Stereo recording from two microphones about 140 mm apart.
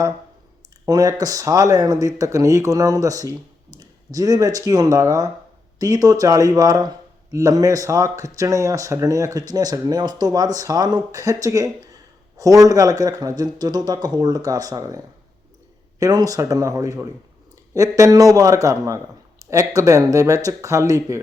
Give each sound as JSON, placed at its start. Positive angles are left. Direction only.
{"t": 0.9, "sound": "speech", "side_deg": -25}